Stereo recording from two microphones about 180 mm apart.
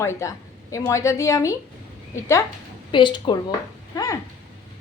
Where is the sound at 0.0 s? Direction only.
15° left (ahead or behind).